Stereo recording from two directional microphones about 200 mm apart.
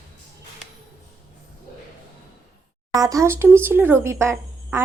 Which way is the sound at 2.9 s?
15° right (ahead or behind).